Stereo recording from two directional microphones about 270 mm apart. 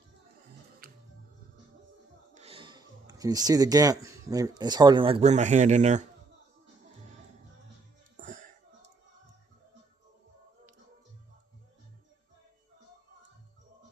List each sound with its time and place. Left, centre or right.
0.8 s music: right
2.3 s speech: right
8.1 s music: right